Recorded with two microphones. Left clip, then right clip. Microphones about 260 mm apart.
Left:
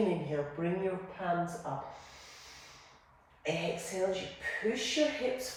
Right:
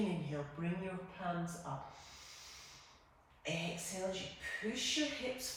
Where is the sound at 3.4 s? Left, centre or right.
Centre.